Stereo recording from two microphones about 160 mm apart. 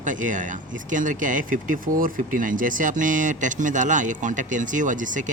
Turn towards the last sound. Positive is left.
turn(degrees=-55)  # may be behind; listen again after turning